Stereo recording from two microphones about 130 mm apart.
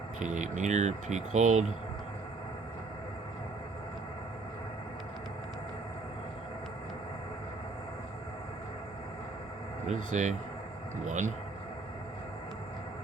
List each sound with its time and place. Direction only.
0.2 s speech: 70° right (ahead or behind)
9.8 s speech: 70° right (ahead or behind)